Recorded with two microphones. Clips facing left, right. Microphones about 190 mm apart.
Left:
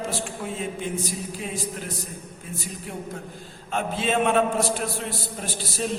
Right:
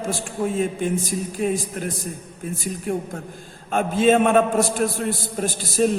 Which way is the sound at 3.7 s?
50° right (ahead or behind).